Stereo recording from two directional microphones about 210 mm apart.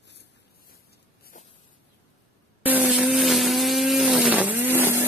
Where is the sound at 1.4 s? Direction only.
40° left (ahead or behind).